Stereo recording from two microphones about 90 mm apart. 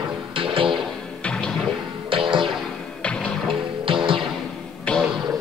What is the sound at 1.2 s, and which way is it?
Music, 10° left (ahead or behind).